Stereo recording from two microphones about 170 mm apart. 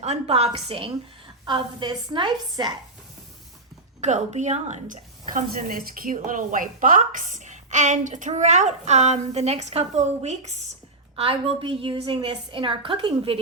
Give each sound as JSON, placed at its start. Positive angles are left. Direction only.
{"t": 0.0, "sound": "a woman's voice", "side_deg": -40}
{"t": 4.0, "sound": "a woman's voice", "side_deg": -45}